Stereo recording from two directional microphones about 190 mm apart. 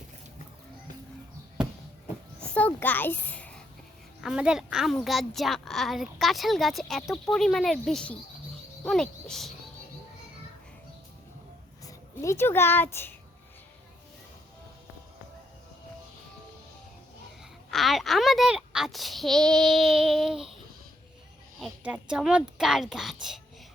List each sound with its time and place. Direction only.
2.4 s a sound: 5° left (ahead or behind)
4.2 s a child's voice: 5° right (ahead or behind)
11.9 s a child's voice: 15° left (ahead or behind)
17.7 s a child's voice: centre (ahead or behind)
21.6 s a child's voice: 5° right (ahead or behind)